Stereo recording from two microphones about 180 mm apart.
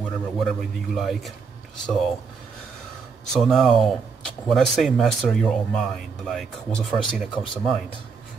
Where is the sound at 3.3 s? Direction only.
Centre (ahead or behind).